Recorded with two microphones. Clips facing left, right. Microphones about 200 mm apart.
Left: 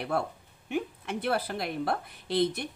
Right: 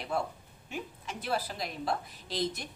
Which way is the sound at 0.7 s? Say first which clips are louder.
Left 8 dB; 60° left (ahead or behind).